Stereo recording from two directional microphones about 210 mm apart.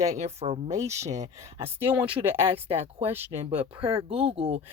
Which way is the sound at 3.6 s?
25° right (ahead or behind).